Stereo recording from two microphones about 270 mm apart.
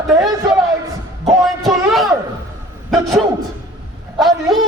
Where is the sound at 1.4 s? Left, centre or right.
Centre.